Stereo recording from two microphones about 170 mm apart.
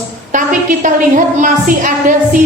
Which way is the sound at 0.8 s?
50° right (ahead or behind).